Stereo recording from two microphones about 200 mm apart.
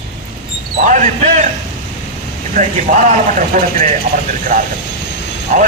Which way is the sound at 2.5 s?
40° right (ahead or behind).